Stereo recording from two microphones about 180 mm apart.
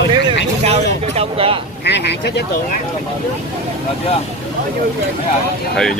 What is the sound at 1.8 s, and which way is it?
Speech, 70° left (ahead or behind).